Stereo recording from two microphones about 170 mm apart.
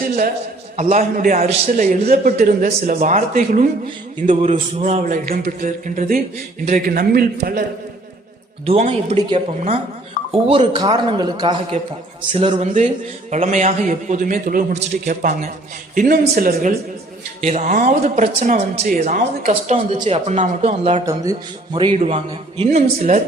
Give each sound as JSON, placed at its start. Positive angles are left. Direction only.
{"t": 0.0, "sound": "a man's voice", "side_deg": -55}
{"t": 8.6, "sound": "speech", "side_deg": -35}
{"t": 16.3, "sound": "a man's voice", "side_deg": -60}
{"t": 17.4, "sound": "speech", "side_deg": -45}
{"t": 21.0, "sound": "speech", "side_deg": -20}